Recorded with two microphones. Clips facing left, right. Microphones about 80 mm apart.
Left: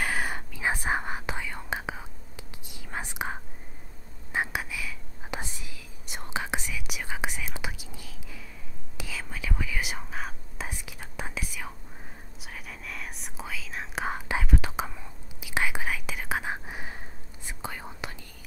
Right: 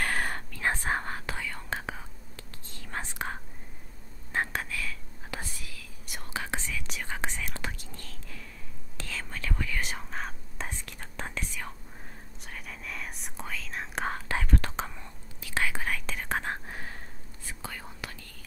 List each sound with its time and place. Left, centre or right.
0.0 s whispering: centre